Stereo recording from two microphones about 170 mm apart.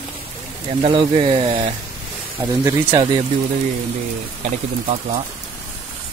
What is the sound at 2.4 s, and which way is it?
Speech, 15° right (ahead or behind).